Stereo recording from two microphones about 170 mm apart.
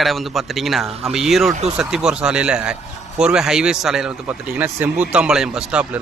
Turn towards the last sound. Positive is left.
turn(degrees=-5)  # may be behind; listen again after turning